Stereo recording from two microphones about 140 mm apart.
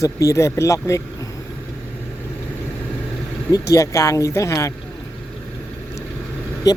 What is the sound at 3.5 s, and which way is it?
Speech, 25° left (ahead or behind).